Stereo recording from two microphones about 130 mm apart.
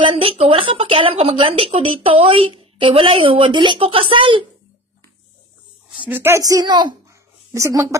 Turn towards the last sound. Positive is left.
turn(degrees=-25)  # may be behind; listen again after turning